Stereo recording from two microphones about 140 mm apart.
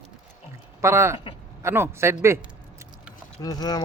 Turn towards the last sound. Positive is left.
turn(degrees=25)  # may be behind; listen again after turning